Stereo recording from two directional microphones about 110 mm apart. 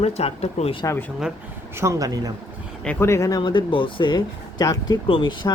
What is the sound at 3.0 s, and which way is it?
Speech, 25° left (ahead or behind).